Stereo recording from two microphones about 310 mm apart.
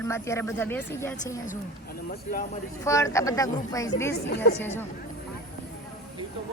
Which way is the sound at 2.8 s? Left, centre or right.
Centre.